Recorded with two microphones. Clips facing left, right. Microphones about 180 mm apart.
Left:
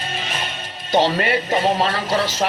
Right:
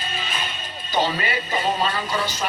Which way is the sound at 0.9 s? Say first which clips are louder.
Left 6 dB; 75° left (ahead or behind).